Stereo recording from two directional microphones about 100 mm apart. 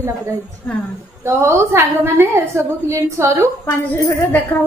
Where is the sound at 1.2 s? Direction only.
30° right (ahead or behind).